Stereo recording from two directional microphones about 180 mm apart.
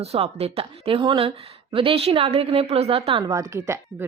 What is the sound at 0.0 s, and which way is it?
A woman's voice, 35° right (ahead or behind).